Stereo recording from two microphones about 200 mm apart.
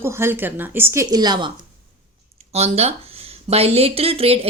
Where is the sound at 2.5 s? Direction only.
30° right (ahead or behind).